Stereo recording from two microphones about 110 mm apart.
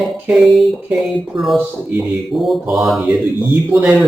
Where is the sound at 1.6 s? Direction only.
15° right (ahead or behind).